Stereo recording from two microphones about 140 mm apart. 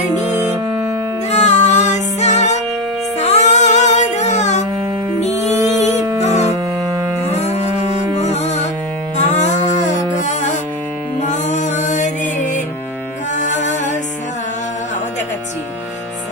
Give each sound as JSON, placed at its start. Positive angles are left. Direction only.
{"t": 0.3, "sound": "music", "side_deg": -15}
{"t": 1.3, "sound": "music", "side_deg": 55}